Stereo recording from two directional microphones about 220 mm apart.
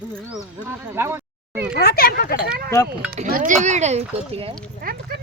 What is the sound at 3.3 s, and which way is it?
Speech, 35° right (ahead or behind).